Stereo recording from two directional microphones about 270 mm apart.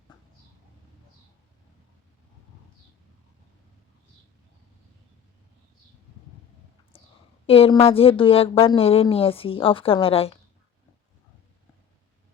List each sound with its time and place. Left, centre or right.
6.9 s whispering: left
7.4 s a woman's voice: left